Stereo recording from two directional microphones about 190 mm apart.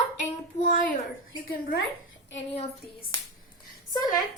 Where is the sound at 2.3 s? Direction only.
35° left (ahead or behind).